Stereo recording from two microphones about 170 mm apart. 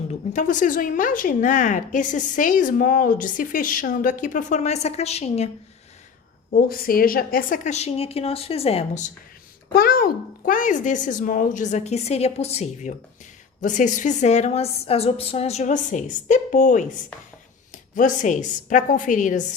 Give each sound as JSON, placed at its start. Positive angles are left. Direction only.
{"t": 0.1, "sound": "speech", "side_deg": 45}
{"t": 6.7, "sound": "a woman's voice", "side_deg": 60}
{"t": 9.7, "sound": "a woman's voice", "side_deg": 60}